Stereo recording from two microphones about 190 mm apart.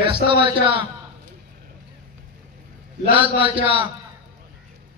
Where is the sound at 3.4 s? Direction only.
10° right (ahead or behind).